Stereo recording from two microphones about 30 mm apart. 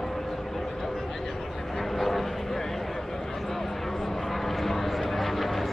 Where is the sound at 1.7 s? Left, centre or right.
Centre.